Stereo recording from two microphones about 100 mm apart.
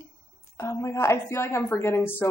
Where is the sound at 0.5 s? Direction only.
25° left (ahead or behind).